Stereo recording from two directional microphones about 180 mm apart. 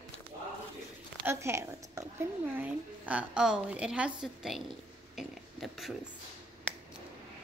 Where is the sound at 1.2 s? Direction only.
15° right (ahead or behind).